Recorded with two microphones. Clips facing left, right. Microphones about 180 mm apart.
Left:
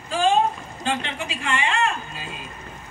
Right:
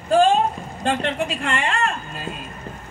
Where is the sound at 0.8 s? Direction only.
55° right (ahead or behind).